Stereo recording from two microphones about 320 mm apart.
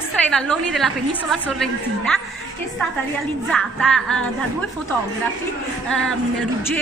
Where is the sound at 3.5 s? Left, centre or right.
Centre.